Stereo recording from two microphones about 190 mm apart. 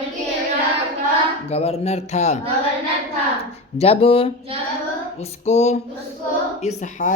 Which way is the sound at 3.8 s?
30° left (ahead or behind).